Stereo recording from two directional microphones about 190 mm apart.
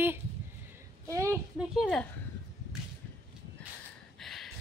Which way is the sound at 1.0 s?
15° right (ahead or behind).